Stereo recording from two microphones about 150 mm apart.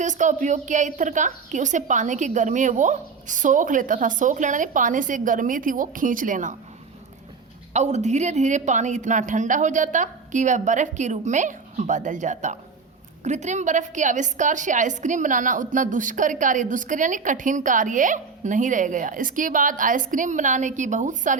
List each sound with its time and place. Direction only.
0.0 s a woman's voice: 55° right (ahead or behind)
7.7 s a woman's voice: 50° right (ahead or behind)